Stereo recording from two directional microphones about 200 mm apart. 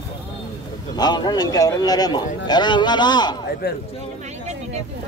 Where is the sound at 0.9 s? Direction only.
20° left (ahead or behind).